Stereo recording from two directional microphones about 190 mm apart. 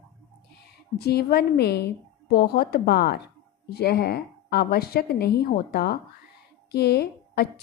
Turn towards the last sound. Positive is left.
turn(degrees=55)  # may be behind; listen again after turning